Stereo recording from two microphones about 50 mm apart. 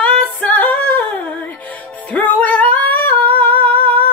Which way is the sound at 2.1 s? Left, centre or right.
Left.